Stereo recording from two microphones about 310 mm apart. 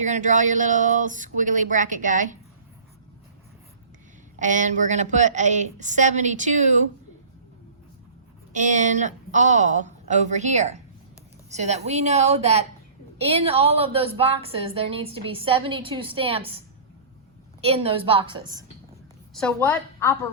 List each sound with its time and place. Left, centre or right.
0.0 s a woman's voice: right
4.4 s a woman's voice: right
8.5 s a woman's voice: right
19.3 s a woman's voice: centre